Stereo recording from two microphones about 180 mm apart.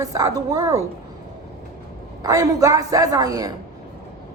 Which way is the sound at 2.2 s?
20° right (ahead or behind).